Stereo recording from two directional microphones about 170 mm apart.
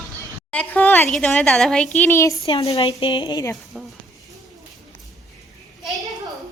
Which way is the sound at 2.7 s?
30° left (ahead or behind).